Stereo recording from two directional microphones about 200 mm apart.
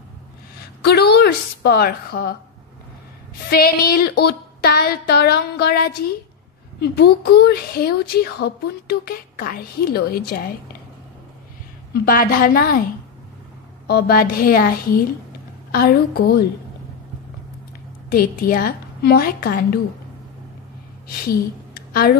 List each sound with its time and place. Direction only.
0.8 s speech: 55° left (ahead or behind)
3.4 s speech: 50° left (ahead or behind)
11.9 s speech: 50° left (ahead or behind)
13.8 s speech: 50° left (ahead or behind)
18.1 s speech: 50° left (ahead or behind)